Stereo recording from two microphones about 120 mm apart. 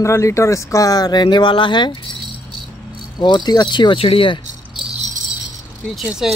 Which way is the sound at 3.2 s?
40° left (ahead or behind).